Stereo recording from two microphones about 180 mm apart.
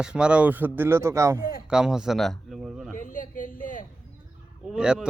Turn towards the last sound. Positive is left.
turn(degrees=-5)  # may be behind; listen again after turning